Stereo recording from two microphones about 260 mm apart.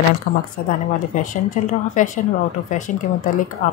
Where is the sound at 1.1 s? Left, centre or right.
Left.